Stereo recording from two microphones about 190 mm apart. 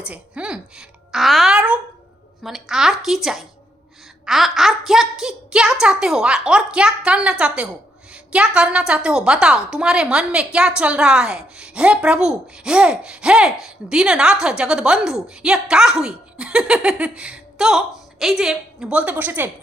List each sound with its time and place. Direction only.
0.0 s a woman's voice: 5° right (ahead or behind)